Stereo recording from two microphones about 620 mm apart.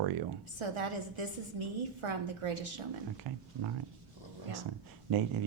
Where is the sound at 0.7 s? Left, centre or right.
Right.